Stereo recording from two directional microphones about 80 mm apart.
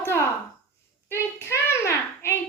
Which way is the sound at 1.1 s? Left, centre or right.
Left.